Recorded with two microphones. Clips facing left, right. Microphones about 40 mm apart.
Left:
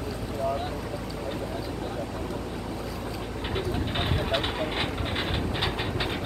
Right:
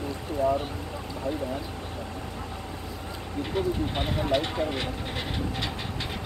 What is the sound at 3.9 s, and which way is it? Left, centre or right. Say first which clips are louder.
Vehicle: even; left.